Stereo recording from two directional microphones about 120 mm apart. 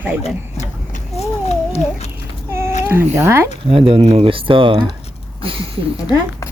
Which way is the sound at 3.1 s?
25° right (ahead or behind).